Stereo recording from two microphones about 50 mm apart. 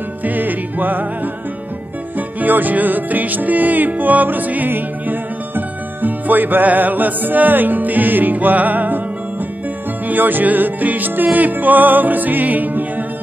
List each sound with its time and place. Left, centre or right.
0.2 s music: right
2.1 s music: right
10.0 s music: right